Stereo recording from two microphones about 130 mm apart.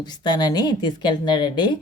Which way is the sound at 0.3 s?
35° left (ahead or behind).